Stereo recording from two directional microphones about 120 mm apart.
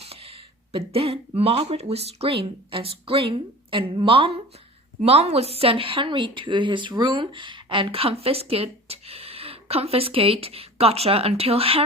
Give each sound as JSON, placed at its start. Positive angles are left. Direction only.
{"t": 0.0, "sound": "speech", "side_deg": -55}
{"t": 4.9, "sound": "speech", "side_deg": -60}